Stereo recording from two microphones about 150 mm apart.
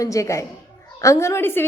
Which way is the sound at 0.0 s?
20° left (ahead or behind).